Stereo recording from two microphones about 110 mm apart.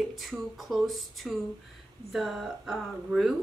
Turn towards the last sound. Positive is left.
turn(degrees=0)  # may be behind; listen again after turning